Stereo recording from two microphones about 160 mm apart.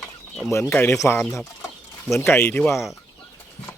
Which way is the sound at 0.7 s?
15° left (ahead or behind).